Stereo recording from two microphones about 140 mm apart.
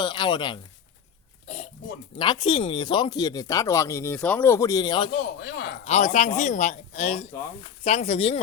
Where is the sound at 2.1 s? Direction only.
30° left (ahead or behind).